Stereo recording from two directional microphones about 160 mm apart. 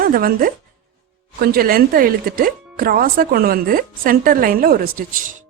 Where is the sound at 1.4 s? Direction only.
70° right (ahead or behind).